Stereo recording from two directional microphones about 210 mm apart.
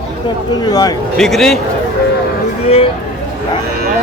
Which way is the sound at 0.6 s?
20° left (ahead or behind).